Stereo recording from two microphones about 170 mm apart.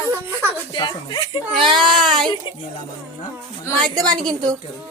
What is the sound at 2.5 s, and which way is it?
Speech, 30° left (ahead or behind).